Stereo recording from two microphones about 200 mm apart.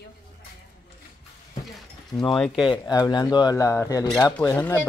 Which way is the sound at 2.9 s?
20° left (ahead or behind).